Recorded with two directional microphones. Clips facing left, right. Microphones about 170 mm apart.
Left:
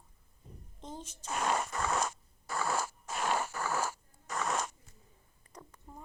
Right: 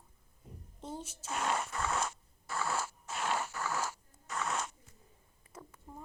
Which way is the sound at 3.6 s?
50° left (ahead or behind).